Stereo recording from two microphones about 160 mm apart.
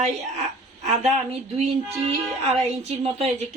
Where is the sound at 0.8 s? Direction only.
45° right (ahead or behind).